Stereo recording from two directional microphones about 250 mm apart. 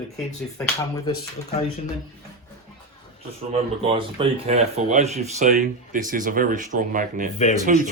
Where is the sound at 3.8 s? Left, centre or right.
Right.